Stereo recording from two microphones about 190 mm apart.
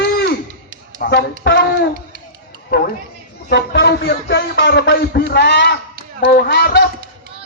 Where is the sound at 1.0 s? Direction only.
60° left (ahead or behind).